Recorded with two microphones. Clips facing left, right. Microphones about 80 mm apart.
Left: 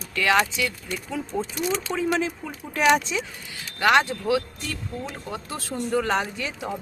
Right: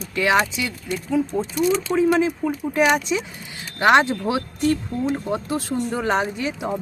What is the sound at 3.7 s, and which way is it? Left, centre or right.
Speech, right.